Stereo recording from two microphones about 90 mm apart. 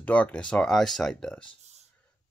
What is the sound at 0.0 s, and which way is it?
Speech, 15° left (ahead or behind).